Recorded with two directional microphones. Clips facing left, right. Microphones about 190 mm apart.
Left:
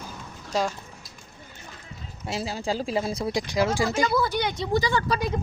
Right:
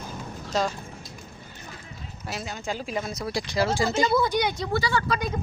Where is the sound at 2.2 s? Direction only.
30° left (ahead or behind).